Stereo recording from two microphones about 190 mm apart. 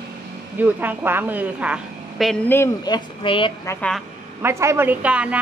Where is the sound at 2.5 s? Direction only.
15° left (ahead or behind).